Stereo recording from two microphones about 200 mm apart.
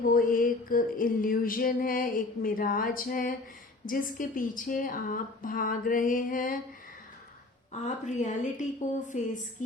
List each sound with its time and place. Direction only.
0.1 s music: 45° left (ahead or behind)
7.7 s a woman's voice: 35° left (ahead or behind)